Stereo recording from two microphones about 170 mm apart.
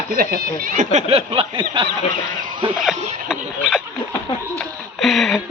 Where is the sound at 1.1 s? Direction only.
35° right (ahead or behind).